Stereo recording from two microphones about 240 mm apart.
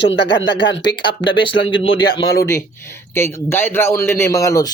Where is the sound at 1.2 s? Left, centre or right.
Left.